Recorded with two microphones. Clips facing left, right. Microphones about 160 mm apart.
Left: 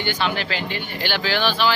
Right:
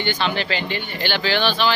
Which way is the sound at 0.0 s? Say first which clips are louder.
Right 1 dB; 10° left (ahead or behind).